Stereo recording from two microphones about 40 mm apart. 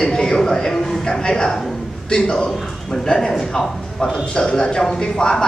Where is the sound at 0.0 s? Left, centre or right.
Centre.